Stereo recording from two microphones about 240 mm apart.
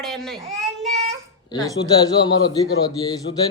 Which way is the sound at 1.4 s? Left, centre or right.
Centre.